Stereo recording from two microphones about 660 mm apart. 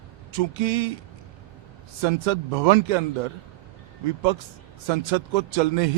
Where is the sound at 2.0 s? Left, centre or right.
Right.